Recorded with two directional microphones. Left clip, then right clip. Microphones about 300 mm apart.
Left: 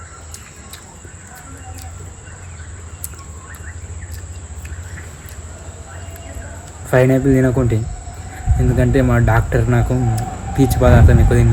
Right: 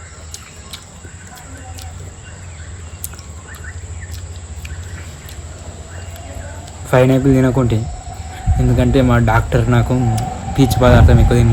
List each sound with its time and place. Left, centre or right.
6.9 s speech: centre
8.7 s speech: centre
10.2 s speech: right
10.8 s speech: centre